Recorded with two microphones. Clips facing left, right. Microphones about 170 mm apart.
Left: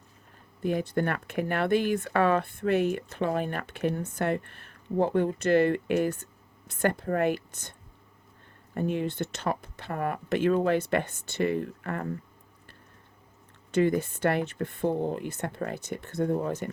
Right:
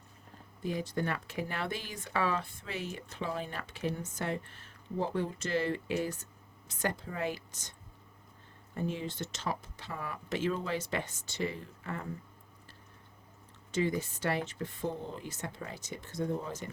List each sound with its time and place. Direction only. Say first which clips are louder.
0.6 s speech: left 7 dB; 60° left (ahead or behind)
13.7 s speech: left 7 dB; 60° left (ahead or behind)